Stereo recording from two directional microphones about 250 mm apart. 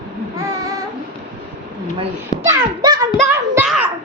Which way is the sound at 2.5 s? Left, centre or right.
Centre.